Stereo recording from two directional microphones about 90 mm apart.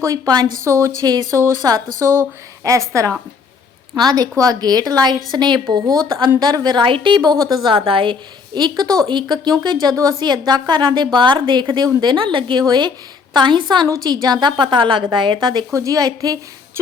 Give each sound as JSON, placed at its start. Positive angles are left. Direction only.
{"t": 0.0, "sound": "a woman's voice", "side_deg": -45}
{"t": 1.3, "sound": "speech", "side_deg": -30}
{"t": 1.6, "sound": "a woman's voice", "side_deg": -45}
{"t": 3.9, "sound": "a woman's voice", "side_deg": -50}
{"t": 7.3, "sound": "a woman's voice", "side_deg": -45}
{"t": 7.9, "sound": "a woman's voice", "side_deg": -75}
{"t": 8.5, "sound": "a woman's voice", "side_deg": -55}
{"t": 12.6, "sound": "a woman's voice", "side_deg": -55}
{"t": 15.7, "sound": "a woman's voice", "side_deg": -40}